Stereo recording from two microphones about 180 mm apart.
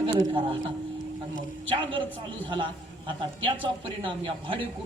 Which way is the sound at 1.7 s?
25° right (ahead or behind).